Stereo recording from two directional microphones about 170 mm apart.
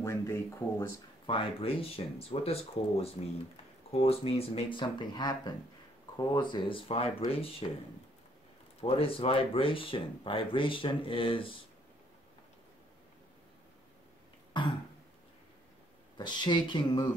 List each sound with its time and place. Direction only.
0.0 s speech: 15° left (ahead or behind)
1.2 s speech: 30° left (ahead or behind)
8.8 s speech: 35° left (ahead or behind)
14.5 s throat clearing: 25° left (ahead or behind)
16.2 s speech: 25° left (ahead or behind)